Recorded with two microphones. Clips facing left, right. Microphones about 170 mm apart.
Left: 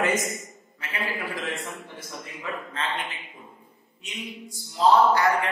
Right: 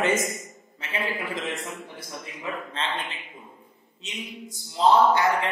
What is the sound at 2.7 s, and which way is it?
Speech, 30° right (ahead or behind).